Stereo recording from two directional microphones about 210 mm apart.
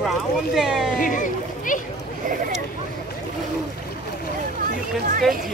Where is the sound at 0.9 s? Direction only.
40° left (ahead or behind).